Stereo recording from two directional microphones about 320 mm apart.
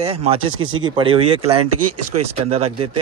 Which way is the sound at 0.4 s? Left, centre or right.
Right.